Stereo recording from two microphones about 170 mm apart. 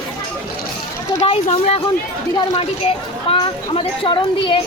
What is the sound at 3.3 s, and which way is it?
A woman's voice, 30° left (ahead or behind).